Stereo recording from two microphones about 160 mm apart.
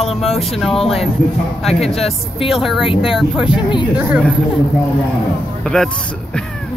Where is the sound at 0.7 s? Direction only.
35° left (ahead or behind).